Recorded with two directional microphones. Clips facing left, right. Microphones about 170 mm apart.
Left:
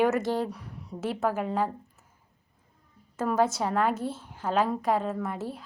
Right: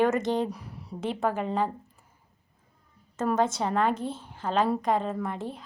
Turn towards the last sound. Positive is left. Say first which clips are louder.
# even
turn(degrees=5)  # may be behind; listen again after turning